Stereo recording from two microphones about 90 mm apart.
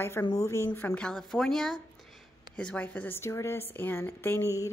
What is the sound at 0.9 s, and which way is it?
A woman's voice, 10° left (ahead or behind).